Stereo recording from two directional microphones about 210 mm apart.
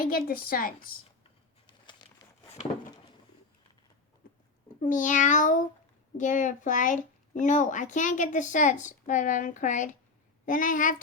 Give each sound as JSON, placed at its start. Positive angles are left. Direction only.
{"t": 0.0, "sound": "a woman's voice", "side_deg": 45}
{"t": 1.2, "sound": "a sound", "side_deg": 20}
{"t": 4.8, "sound": "a child's voice", "side_deg": 40}